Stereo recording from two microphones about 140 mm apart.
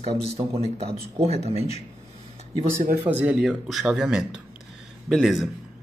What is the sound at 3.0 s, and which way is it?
Speech, 10° right (ahead or behind).